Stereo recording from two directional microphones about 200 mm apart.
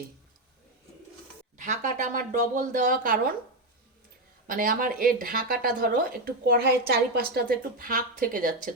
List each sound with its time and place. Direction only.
1.5 s speech: 35° right (ahead or behind)
4.4 s speech: 45° right (ahead or behind)